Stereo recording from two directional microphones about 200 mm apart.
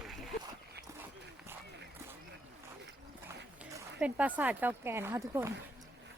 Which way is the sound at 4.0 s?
5° right (ahead or behind).